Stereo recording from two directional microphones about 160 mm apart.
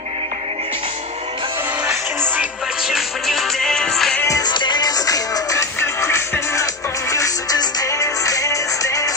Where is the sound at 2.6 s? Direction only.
Centre (ahead or behind).